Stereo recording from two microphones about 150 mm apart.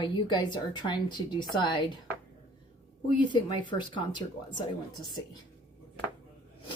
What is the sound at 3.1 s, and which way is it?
Speech, 30° left (ahead or behind).